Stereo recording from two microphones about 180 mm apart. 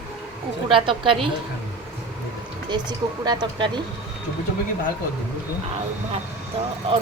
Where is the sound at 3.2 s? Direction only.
25° right (ahead or behind).